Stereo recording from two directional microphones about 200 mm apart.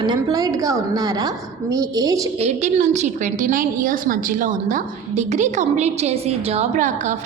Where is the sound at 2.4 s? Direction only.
35° right (ahead or behind).